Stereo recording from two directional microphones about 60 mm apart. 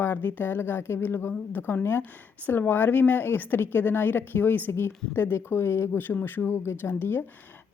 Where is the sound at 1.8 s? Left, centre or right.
Left.